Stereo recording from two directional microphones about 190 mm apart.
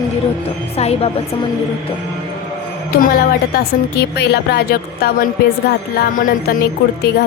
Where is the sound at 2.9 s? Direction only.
50° left (ahead or behind).